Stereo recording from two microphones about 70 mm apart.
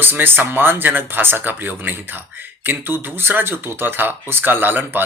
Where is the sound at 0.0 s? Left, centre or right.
Right.